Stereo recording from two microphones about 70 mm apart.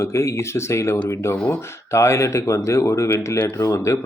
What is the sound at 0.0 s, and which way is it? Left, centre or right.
Speech, left.